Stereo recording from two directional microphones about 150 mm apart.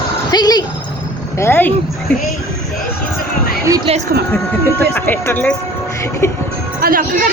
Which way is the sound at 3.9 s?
40° right (ahead or behind).